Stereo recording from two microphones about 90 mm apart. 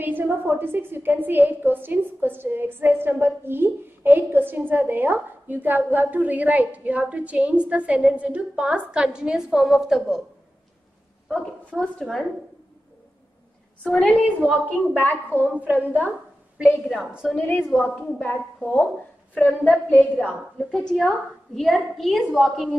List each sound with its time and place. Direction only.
0.0 s a woman's voice: 20° right (ahead or behind); by 10.2 s 5° right (ahead or behind)
11.2 s a woman's voice: 5° left (ahead or behind)
13.8 s a woman's voice: 5° left (ahead or behind)
15.4 s a woman's voice: 20° right (ahead or behind)
16.9 s a woman's voice: 5° right (ahead or behind)
17.9 s a woman's voice: 20° left (ahead or behind)
20.5 s a woman's voice: centre (ahead or behind)